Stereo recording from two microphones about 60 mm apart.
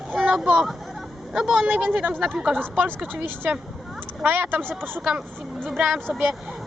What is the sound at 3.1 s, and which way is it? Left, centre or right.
Speech, right.